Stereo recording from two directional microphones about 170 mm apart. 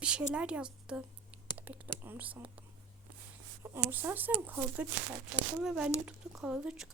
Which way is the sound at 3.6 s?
15° right (ahead or behind).